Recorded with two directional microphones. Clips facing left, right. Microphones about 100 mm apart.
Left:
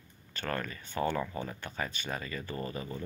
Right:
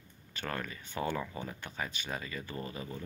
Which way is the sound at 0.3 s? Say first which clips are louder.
Left 3 dB; 5° right (ahead or behind).